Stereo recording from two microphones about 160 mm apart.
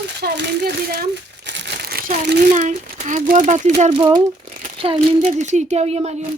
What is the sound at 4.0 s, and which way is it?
Speech, 30° right (ahead or behind).